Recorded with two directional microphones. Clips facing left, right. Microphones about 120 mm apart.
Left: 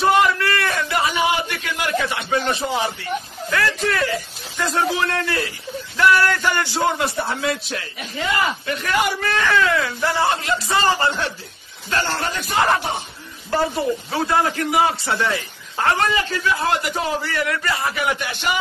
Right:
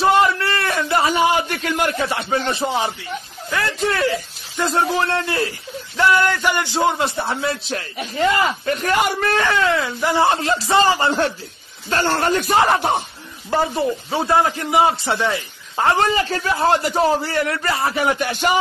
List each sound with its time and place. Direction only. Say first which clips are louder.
0.0 s a sound: right 1 dB; 30° right (ahead or behind)
2.0 s a man's voice: right 1 dB; 30° right (ahead or behind)
7.7 s a man's voice: right 4 dB; 40° right (ahead or behind)
9.4 s a man's voice: left 2 dB; 25° right (ahead or behind)
10.3 s a man's voice: right 3 dB; 30° right (ahead or behind)
10.8 s speech: right 3 dB; 15° right (ahead or behind)
11.1 s a woman's voice: right 4 dB; 45° right (ahead or behind)
13.7 s a man's voice: right 1 dB; 25° right (ahead or behind)
16.3 s a man's voice: right 3 dB; 35° right (ahead or behind)